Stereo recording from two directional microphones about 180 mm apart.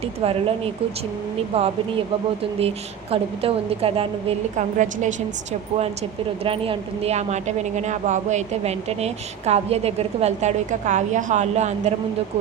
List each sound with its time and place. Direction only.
0.2 s a woman's voice: 30° right (ahead or behind)
6.4 s a woman's voice: 30° right (ahead or behind)